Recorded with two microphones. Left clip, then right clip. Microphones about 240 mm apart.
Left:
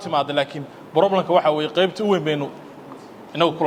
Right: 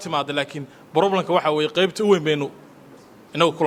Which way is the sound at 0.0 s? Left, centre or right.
Right.